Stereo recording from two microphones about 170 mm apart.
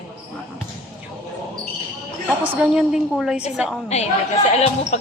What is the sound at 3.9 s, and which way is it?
A woman's voice, 40° left (ahead or behind).